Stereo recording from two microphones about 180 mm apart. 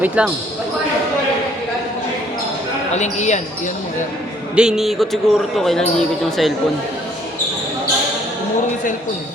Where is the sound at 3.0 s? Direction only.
40° left (ahead or behind).